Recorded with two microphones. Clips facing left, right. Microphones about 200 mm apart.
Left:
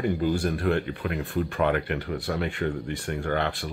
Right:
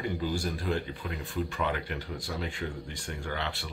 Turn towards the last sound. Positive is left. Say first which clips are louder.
# left 8 dB
turn(degrees=50)  # may be behind; listen again after turning